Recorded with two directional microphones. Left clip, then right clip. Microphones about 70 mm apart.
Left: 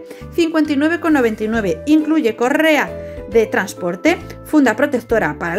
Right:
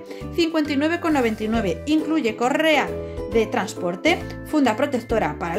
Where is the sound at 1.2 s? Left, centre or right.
Left.